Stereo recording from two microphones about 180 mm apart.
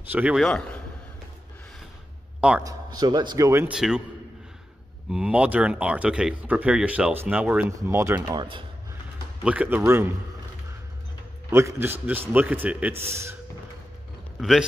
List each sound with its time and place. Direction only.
0.1 s a man's voice: 5° right (ahead or behind)
2.6 s a man's voice: 20° right (ahead or behind)
3.7 s a man's voice: 5° right (ahead or behind)
5.1 s speech: 5° right (ahead or behind); by 8.6 s 25° right (ahead or behind)
9.4 s speech: 5° right (ahead or behind)
11.5 s speech: 15° right (ahead or behind)